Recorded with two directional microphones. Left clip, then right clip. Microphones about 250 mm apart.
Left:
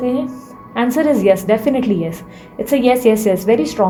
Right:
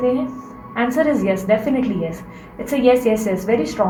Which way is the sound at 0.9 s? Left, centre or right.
Left.